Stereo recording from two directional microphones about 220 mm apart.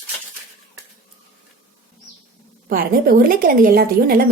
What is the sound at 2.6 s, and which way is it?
A woman's voice, 40° right (ahead or behind).